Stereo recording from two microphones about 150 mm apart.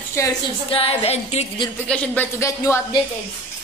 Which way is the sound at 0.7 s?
40° left (ahead or behind).